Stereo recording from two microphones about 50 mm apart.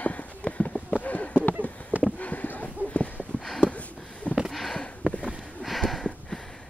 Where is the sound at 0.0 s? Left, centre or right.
Left.